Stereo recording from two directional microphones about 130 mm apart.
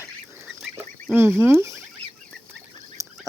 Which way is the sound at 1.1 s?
15° right (ahead or behind).